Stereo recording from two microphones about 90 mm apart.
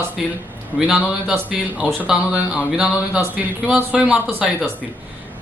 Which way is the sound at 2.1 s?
10° right (ahead or behind).